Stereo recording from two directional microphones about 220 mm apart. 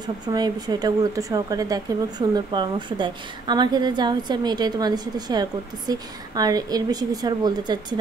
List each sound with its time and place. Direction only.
0.0 s speech: 20° right (ahead or behind)